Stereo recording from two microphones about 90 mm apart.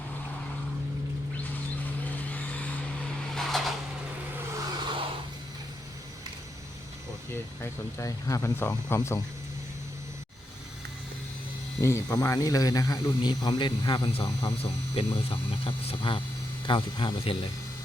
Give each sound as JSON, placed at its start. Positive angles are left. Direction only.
{"t": 2.0, "sound": "vehicle", "side_deg": 20}
{"t": 3.3, "sound": "vehicle", "side_deg": 0}
{"t": 4.8, "sound": "a sound", "side_deg": -60}
{"t": 7.6, "sound": "speech", "side_deg": 35}
{"t": 8.5, "sound": "speech", "side_deg": 25}
{"t": 11.8, "sound": "a man's voice", "side_deg": 30}
{"t": 16.6, "sound": "a man's voice", "side_deg": 65}